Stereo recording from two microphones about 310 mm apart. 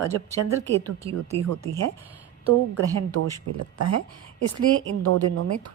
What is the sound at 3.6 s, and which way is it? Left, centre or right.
A woman's voice, right.